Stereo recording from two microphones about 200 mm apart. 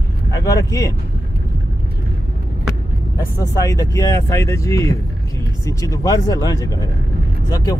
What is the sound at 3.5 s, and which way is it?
Speech, 15° left (ahead or behind).